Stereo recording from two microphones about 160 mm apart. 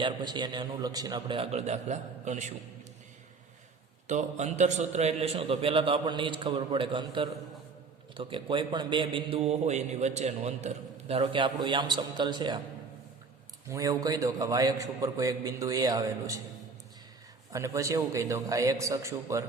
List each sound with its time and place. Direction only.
0.0 s a man's voice: 30° right (ahead or behind); by 2.5 s 45° right (ahead or behind)
4.0 s a man's voice: 50° right (ahead or behind); by 12.5 s 30° right (ahead or behind)
13.7 s a man's voice: 20° right (ahead or behind)
17.5 s a man's voice: 20° right (ahead or behind)